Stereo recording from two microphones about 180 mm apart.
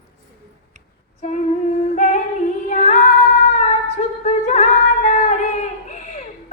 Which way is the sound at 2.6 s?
40° left (ahead or behind).